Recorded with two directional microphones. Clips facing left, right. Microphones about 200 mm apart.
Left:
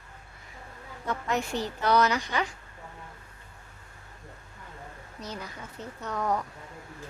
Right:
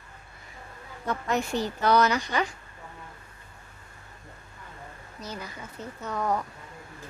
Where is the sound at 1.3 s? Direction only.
40° right (ahead or behind).